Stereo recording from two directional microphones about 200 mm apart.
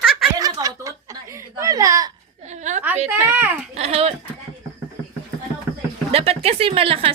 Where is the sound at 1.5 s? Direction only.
15° right (ahead or behind).